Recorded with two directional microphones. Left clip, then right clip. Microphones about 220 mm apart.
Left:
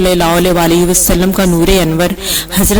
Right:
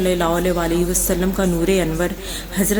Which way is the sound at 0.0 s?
40° left (ahead or behind).